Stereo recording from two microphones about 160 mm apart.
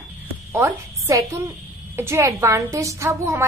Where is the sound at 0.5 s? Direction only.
20° right (ahead or behind).